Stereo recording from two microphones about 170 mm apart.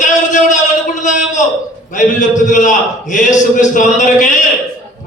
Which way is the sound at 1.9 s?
45° left (ahead or behind).